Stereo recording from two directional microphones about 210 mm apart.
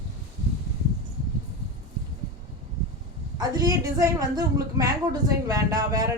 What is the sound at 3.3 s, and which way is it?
A woman's voice, 20° right (ahead or behind).